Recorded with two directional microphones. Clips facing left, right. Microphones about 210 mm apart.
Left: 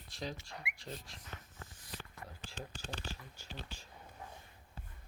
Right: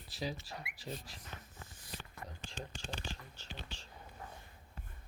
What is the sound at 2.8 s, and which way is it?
Speech, 5° left (ahead or behind).